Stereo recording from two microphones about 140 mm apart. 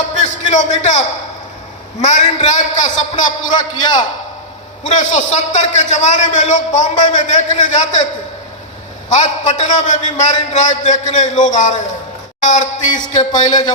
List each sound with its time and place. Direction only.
0.2 s a man's voice: 60° left (ahead or behind)
4.8 s a man's voice: 60° left (ahead or behind)